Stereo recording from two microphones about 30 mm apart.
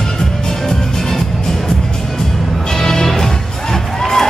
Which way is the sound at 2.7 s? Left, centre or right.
Centre.